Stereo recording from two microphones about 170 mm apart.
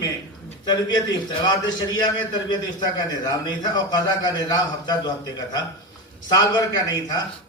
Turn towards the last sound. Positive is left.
turn(degrees=25)  # may be behind; listen again after turning